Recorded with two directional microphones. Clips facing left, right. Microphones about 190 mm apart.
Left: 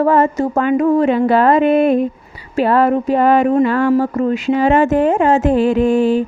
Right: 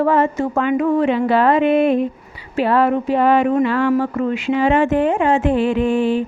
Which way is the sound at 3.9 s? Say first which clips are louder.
Left 3 dB; 40° left (ahead or behind).